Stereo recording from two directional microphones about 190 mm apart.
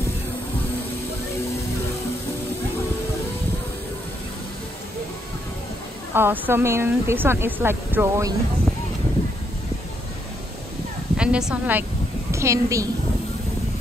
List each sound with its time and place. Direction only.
6.1 s speech: 10° right (ahead or behind)
11.1 s a woman's voice: 5° right (ahead or behind)